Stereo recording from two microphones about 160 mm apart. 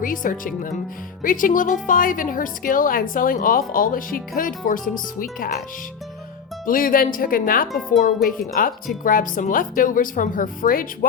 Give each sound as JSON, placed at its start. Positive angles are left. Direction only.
{"t": 0.0, "sound": "a woman's voice", "side_deg": 60}
{"t": 6.7, "sound": "a woman's voice", "side_deg": 60}